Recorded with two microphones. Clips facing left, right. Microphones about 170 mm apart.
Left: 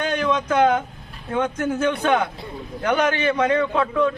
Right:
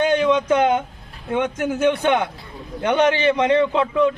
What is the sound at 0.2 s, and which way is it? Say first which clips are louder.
Speech: right 2 dB; 20° right (ahead or behind).